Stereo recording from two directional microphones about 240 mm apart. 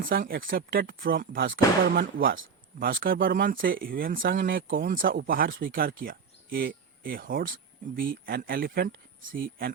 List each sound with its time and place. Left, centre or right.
0.0 s speech: right
1.4 s speech: right
1.8 s speech: right